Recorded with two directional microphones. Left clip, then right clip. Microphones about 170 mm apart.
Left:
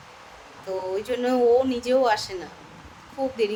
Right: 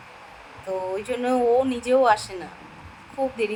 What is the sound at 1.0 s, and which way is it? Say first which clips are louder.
Speech: left 2 dB; centre (ahead or behind).